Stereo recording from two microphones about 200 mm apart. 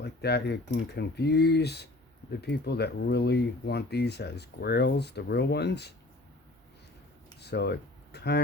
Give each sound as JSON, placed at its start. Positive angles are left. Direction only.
{"t": 0.0, "sound": "speech", "side_deg": 55}
{"t": 7.4, "sound": "speech", "side_deg": 55}